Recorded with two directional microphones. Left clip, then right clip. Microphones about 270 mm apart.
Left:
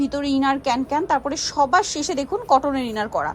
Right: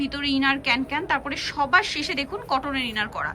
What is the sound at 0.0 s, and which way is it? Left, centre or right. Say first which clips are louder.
A woman's voice: left 2 dB; centre.